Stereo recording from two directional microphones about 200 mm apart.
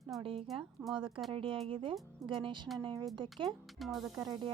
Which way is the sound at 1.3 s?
25° right (ahead or behind).